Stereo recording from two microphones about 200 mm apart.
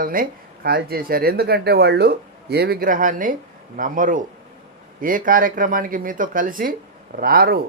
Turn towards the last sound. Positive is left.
turn(degrees=-50)  # may be behind; listen again after turning